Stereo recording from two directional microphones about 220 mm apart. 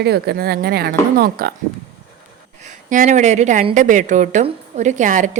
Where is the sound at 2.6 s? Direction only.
35° right (ahead or behind).